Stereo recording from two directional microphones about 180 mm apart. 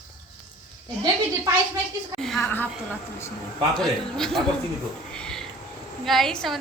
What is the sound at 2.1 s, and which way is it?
Speech, centre (ahead or behind).